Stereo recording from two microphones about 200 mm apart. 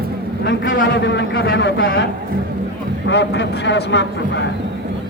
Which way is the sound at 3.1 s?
60° left (ahead or behind).